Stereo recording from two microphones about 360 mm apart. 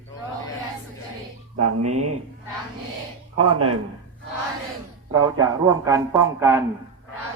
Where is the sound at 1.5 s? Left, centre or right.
Right.